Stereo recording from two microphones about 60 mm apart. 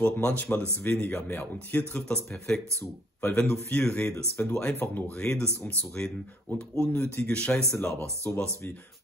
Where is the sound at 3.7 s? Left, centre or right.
Centre.